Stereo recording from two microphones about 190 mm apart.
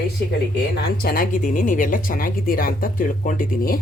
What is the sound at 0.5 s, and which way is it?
Speech, 55° left (ahead or behind).